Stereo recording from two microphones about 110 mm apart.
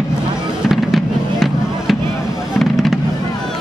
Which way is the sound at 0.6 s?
Centre (ahead or behind).